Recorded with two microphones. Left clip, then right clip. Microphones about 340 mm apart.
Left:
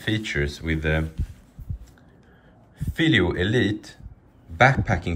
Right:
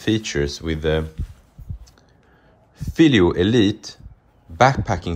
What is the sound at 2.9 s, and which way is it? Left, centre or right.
Speech, centre.